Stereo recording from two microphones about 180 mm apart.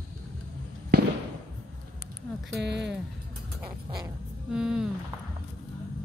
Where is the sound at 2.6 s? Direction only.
75° right (ahead or behind).